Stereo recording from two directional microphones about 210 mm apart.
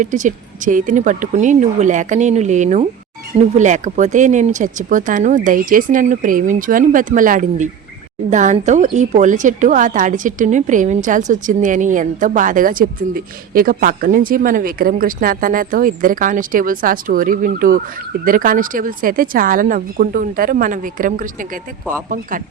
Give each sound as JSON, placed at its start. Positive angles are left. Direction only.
{"t": 0.0, "sound": "a woman's voice", "side_deg": -35}